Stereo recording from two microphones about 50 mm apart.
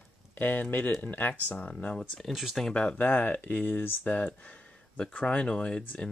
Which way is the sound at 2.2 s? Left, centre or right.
Centre.